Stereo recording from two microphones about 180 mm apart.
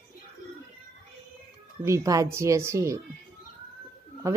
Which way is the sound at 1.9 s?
20° right (ahead or behind).